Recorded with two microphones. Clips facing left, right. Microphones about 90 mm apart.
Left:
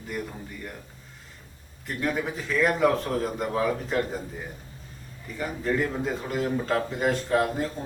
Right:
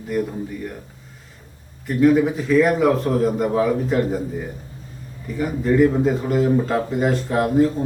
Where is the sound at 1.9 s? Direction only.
5° right (ahead or behind).